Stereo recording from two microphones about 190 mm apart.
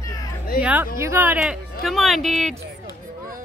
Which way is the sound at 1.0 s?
10° right (ahead or behind).